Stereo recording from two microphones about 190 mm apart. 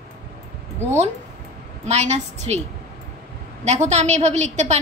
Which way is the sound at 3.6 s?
35° right (ahead or behind).